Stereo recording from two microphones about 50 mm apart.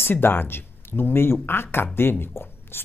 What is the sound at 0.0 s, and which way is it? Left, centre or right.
Speech, left.